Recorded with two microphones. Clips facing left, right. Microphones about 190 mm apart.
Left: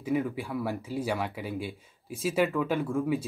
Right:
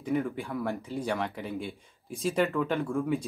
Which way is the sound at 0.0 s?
5° left (ahead or behind).